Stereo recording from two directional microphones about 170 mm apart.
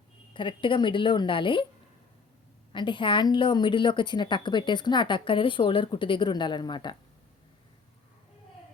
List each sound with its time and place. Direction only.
0.3 s a woman's voice: 30° left (ahead or behind)
2.7 s a woman's voice: 30° left (ahead or behind)